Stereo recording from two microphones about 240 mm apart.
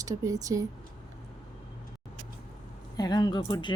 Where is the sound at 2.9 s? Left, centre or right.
Centre.